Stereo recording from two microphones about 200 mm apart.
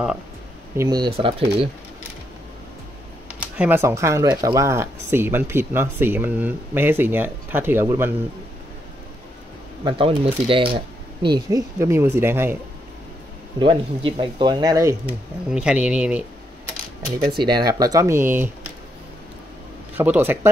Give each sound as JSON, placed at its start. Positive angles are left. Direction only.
{"t": 0.7, "sound": "speech", "side_deg": -20}
{"t": 3.3, "sound": "speech", "side_deg": -5}
{"t": 9.8, "sound": "speech", "side_deg": -25}
{"t": 13.6, "sound": "speech", "side_deg": -25}
{"t": 17.4, "sound": "speech", "side_deg": -20}
{"t": 20.0, "sound": "speech", "side_deg": -10}